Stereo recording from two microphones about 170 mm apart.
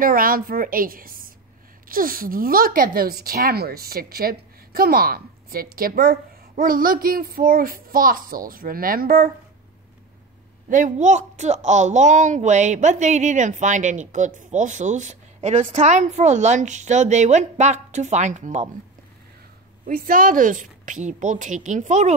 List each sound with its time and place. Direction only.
0.0 s a woman's voice: 55° right (ahead or behind)
10.7 s speech: 50° right (ahead or behind)
19.9 s speech: 55° right (ahead or behind)